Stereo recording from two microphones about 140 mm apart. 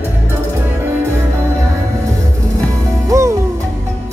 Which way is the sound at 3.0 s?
20° right (ahead or behind).